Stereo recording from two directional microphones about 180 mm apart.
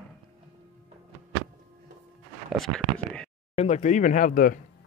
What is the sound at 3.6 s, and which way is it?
Speech, 40° left (ahead or behind).